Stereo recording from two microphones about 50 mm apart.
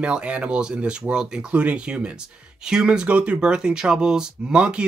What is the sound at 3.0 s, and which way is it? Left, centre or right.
Speech, right.